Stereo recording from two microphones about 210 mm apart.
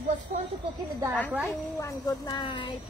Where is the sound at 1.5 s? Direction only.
15° left (ahead or behind).